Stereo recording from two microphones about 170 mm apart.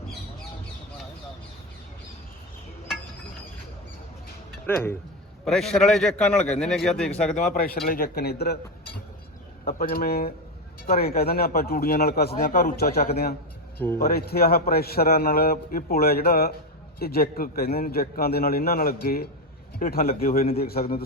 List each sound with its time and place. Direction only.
4.6 s speech: 15° left (ahead or behind)
5.5 s a man's voice: centre (ahead or behind)
7.5 s a man's voice: 60° left (ahead or behind)
9.6 s a man's voice: 65° left (ahead or behind)
13.7 s speech: 15° left (ahead or behind)
14.0 s a man's voice: 65° left (ahead or behind)